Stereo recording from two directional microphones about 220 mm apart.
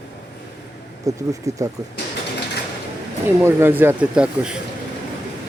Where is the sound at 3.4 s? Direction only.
10° right (ahead or behind).